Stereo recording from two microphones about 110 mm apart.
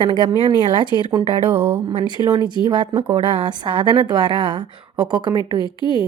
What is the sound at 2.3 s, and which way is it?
Speech, 40° right (ahead or behind).